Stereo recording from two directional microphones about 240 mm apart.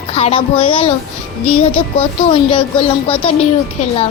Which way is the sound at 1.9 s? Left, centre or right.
Left.